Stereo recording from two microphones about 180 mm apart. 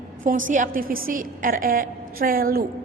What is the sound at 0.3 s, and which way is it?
A woman's voice, 50° right (ahead or behind).